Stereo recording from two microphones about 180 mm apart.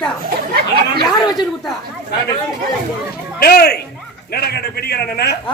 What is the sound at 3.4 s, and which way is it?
A man's voice, 60° left (ahead or behind).